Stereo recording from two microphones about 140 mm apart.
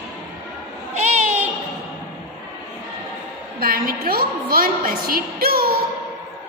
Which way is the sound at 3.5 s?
90° right.